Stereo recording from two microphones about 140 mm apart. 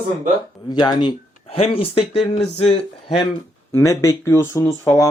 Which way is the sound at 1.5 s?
45° left (ahead or behind).